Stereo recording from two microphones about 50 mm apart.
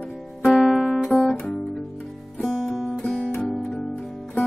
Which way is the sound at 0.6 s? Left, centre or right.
Centre.